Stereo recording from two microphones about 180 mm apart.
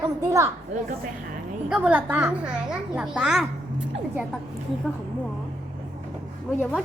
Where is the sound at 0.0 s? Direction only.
15° right (ahead or behind).